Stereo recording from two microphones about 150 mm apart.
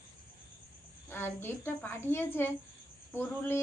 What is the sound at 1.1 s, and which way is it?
A woman's voice, 15° left (ahead or behind).